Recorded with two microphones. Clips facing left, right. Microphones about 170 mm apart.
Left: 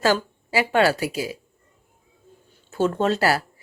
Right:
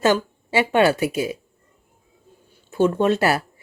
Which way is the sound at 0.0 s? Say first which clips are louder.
Right 2 dB; 20° right (ahead or behind).